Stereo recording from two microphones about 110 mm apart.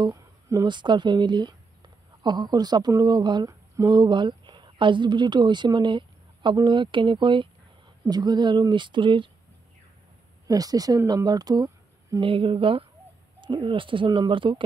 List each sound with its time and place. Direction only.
0.1 s a sound: 30° right (ahead or behind)
0.7 s speech: 45° right (ahead or behind)
8.1 s speech: 40° right (ahead or behind)
10.4 s speech: 35° right (ahead or behind)
11.2 s a sound: 35° right (ahead or behind)
12.2 s speech: 55° right (ahead or behind)